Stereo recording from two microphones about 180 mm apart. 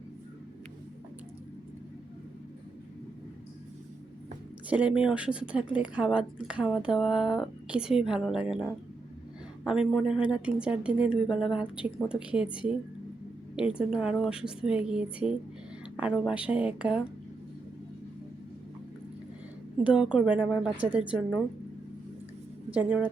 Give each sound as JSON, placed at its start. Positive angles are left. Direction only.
{"t": 4.7, "sound": "speech", "side_deg": -5}
{"t": 9.6, "sound": "a woman's voice", "side_deg": -5}
{"t": 19.8, "sound": "a woman's voice", "side_deg": -5}
{"t": 22.7, "sound": "a woman's voice", "side_deg": -10}